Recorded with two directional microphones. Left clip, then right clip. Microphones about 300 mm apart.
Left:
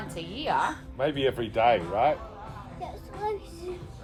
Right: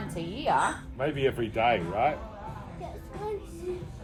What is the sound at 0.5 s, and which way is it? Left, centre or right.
Speech, centre.